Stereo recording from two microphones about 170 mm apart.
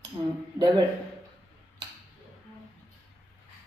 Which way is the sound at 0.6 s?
25° right (ahead or behind).